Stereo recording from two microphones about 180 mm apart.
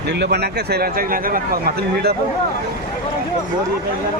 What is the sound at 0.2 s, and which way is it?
Speech, 65° right (ahead or behind).